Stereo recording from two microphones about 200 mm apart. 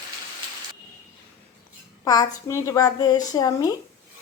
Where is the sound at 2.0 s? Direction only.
20° left (ahead or behind).